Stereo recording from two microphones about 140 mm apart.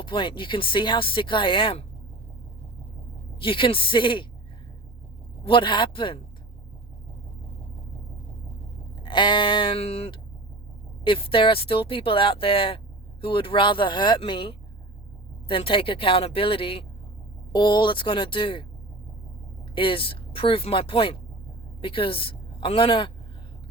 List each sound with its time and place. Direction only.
0.0 s speech: 35° left (ahead or behind)
3.4 s speech: 40° left (ahead or behind)
5.5 s speech: 35° left (ahead or behind)
9.0 s speech: 35° left (ahead or behind)
19.7 s a woman's voice: 40° left (ahead or behind)